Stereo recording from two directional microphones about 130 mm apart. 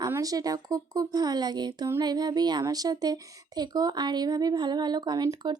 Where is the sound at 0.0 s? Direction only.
25° right (ahead or behind).